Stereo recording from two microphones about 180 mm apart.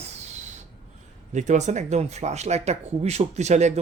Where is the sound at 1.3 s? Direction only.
40° right (ahead or behind).